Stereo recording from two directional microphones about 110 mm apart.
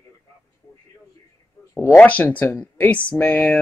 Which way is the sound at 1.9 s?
15° left (ahead or behind).